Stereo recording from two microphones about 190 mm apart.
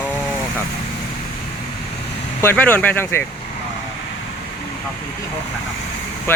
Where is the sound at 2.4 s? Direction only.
10° left (ahead or behind).